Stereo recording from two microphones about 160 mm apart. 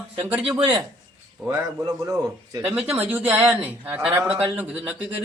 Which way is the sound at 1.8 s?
25° right (ahead or behind).